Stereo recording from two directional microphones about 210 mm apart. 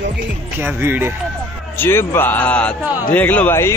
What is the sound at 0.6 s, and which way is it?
Speech, 10° right (ahead or behind).